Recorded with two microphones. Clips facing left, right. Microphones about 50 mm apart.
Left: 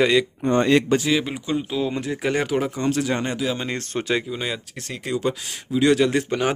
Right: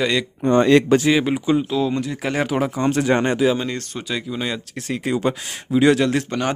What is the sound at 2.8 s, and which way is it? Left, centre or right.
Speech, right.